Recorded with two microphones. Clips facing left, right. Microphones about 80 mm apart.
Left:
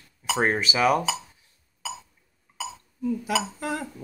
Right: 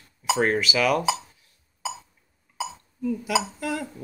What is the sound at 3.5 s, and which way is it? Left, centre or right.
Speech, left.